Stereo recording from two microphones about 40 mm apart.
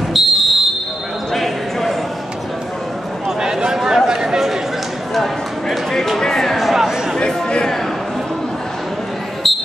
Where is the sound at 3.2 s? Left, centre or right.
Centre.